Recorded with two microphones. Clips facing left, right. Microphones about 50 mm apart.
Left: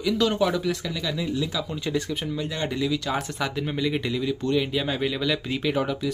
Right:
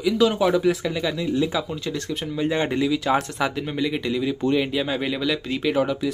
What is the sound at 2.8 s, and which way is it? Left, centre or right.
Speech, centre.